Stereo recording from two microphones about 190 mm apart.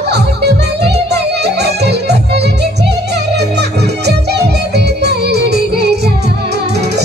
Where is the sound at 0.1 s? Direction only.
60° right (ahead or behind).